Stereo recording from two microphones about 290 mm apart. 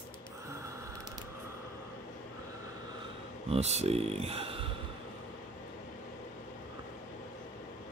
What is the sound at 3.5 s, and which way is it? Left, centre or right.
Speech, right.